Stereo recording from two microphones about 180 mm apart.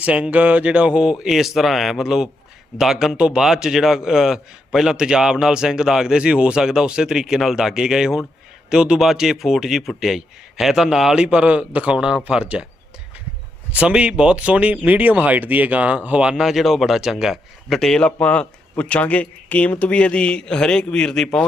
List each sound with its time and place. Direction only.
0.0 s speech: 5° right (ahead or behind)
13.7 s speech: 5° right (ahead or behind)